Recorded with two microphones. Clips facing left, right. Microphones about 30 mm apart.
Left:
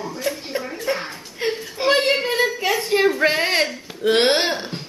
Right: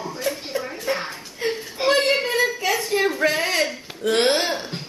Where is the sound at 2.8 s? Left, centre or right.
Left.